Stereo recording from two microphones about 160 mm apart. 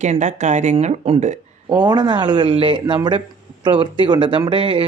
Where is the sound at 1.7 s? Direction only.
25° right (ahead or behind).